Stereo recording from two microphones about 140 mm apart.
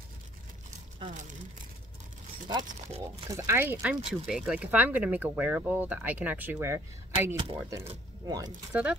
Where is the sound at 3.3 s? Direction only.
20° right (ahead or behind).